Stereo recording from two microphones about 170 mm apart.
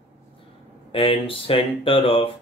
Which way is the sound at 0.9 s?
30° left (ahead or behind).